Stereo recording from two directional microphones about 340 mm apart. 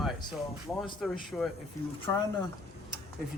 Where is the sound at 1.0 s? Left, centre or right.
Centre.